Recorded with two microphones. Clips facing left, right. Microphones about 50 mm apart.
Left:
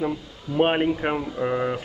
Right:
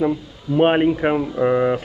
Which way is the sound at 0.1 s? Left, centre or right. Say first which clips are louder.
Right 7 dB; centre.